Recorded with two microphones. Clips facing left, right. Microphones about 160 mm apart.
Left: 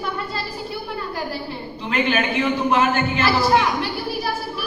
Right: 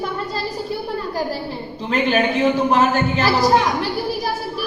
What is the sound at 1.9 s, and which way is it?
A man's voice, 40° right (ahead or behind).